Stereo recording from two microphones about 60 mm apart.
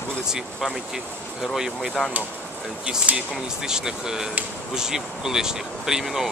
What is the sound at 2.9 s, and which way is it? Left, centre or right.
Speech, right.